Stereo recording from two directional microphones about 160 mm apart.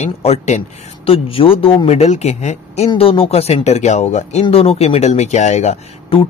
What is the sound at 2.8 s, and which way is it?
A man's voice, 35° left (ahead or behind).